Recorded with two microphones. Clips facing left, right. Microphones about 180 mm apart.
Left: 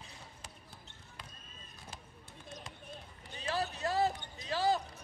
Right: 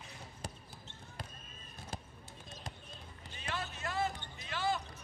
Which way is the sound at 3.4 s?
35° left (ahead or behind).